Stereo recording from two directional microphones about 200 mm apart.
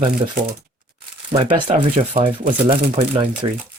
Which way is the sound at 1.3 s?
25° right (ahead or behind).